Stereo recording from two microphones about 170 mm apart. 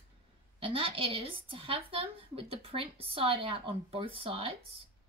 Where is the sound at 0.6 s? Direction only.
30° right (ahead or behind).